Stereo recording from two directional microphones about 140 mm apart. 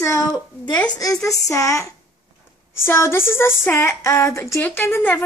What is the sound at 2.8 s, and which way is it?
Female singing, 15° left (ahead or behind).